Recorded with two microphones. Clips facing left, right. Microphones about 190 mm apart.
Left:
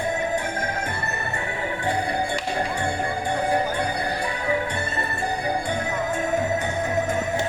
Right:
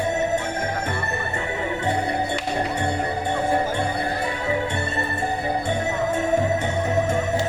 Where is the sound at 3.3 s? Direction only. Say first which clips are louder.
Right 1 dB; 25° right (ahead or behind).